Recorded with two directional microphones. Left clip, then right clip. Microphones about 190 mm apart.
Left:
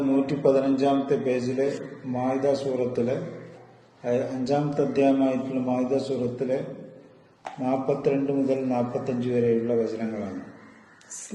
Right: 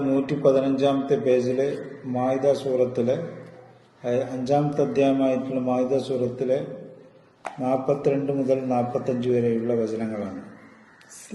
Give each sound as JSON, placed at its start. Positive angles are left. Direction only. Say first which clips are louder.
{"t": 0.3, "sound": "a man's voice", "louder": "right 3 dB", "side_deg": -25}
{"t": 7.6, "sound": "a man's voice", "louder": "right 2 dB", "side_deg": -30}